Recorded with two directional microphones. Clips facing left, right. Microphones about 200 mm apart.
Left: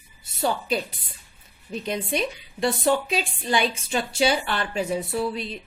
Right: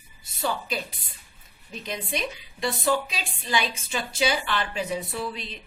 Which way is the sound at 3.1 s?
55° left (ahead or behind).